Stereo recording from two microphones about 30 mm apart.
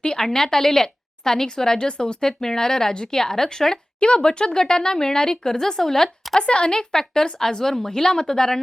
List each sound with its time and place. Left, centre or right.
0.2 s a woman's voice: centre
4.0 s a woman's voice: left
6.4 s a woman's voice: left; by 8.6 s centre